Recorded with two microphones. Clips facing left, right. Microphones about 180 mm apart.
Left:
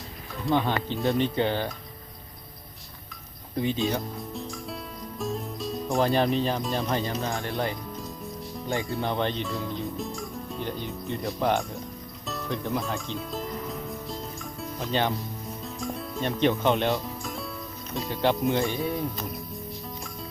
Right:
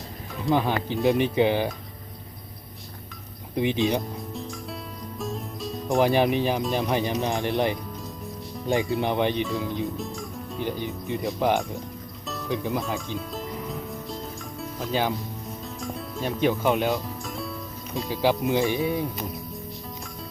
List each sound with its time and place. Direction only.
0.4 s speech: 10° right (ahead or behind)
3.5 s speech: 15° right (ahead or behind)
5.1 s music: centre (ahead or behind)
5.9 s speech: 15° right (ahead or behind)
9.4 s speech: centre (ahead or behind)
12.3 s music: centre (ahead or behind)
16.0 s speech: centre (ahead or behind)